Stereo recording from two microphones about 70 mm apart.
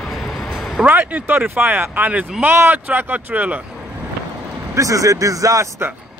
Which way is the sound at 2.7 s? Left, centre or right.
Right.